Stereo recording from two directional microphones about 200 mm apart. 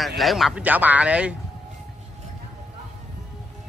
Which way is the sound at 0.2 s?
Centre (ahead or behind).